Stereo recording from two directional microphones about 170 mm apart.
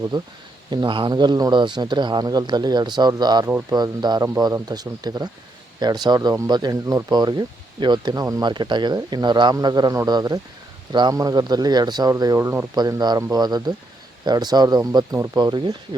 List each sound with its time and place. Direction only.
0.1 s speech: 25° right (ahead or behind)